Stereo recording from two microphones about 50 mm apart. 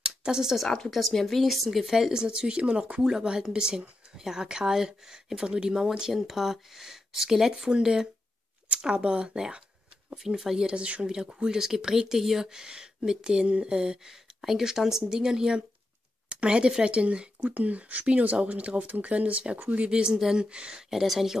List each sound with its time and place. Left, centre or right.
0.0 s speech: centre
2.2 s speech: centre
3.0 s speech: centre
10.1 s speech: centre
17.4 s speech: right
20.9 s speech: centre